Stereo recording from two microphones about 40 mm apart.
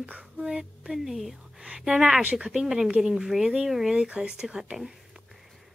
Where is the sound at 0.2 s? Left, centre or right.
Centre.